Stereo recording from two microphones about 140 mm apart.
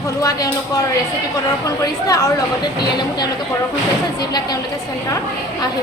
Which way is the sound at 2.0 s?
25° left (ahead or behind).